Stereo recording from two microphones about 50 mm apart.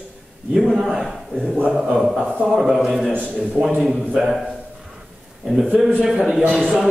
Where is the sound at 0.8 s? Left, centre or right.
Centre.